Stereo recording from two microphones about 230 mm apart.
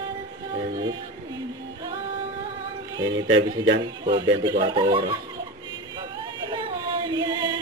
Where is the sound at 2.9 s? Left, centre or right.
Centre.